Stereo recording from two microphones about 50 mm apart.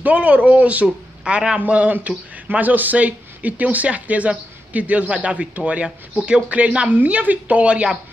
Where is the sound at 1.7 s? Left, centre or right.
Right.